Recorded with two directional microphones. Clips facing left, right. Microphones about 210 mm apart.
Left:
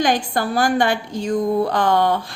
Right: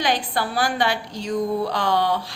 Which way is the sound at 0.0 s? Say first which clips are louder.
Left 4 dB; 45° left (ahead or behind).